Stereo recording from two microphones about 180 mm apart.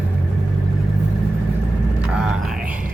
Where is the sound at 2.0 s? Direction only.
5° right (ahead or behind).